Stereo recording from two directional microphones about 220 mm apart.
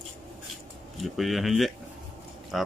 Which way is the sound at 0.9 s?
Centre (ahead or behind).